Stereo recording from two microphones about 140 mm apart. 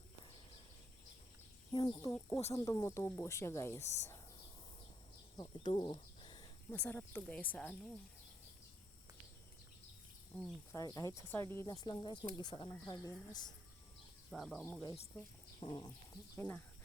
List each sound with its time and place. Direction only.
1.7 s speech: 35° left (ahead or behind)
5.4 s speech: 30° left (ahead or behind)
6.7 s speech: 15° left (ahead or behind)
10.3 s speech: 10° left (ahead or behind)
10.7 s speech: 25° left (ahead or behind)
14.3 s speech: centre (ahead or behind)
14.6 s speech: 20° left (ahead or behind)
15.6 s speech: 35° left (ahead or behind)
16.4 s speech: 15° left (ahead or behind)